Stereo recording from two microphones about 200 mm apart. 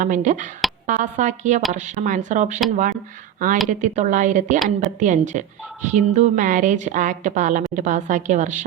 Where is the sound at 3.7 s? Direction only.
35° right (ahead or behind).